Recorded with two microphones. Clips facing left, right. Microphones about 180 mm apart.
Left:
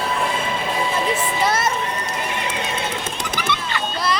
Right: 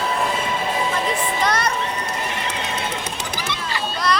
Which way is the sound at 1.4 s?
5° left (ahead or behind).